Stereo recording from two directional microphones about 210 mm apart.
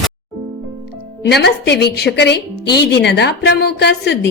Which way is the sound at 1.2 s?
55° left (ahead or behind).